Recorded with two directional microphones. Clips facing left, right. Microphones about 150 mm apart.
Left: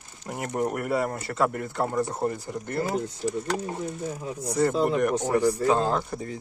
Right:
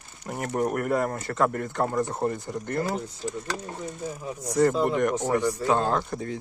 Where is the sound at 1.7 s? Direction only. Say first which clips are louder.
Even; 10° left (ahead or behind).